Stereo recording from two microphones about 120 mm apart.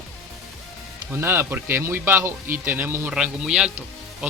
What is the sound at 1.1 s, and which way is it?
Speech, 20° right (ahead or behind).